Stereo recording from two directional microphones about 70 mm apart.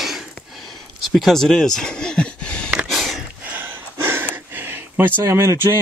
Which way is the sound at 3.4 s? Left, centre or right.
Right.